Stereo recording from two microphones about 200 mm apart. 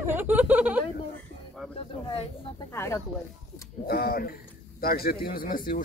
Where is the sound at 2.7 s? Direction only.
10° left (ahead or behind).